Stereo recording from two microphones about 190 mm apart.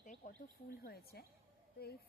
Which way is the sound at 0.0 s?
40° left (ahead or behind).